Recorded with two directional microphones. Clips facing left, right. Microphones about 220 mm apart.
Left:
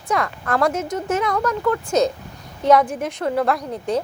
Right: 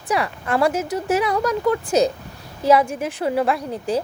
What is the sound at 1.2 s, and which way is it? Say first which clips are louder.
Speech: right 1 dB; 10° right (ahead or behind).